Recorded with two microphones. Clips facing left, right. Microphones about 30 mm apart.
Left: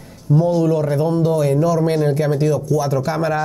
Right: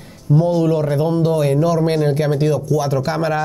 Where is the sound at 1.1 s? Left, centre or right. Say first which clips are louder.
Even; right.